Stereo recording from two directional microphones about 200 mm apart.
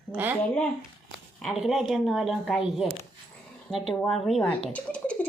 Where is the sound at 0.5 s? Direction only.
5° left (ahead or behind).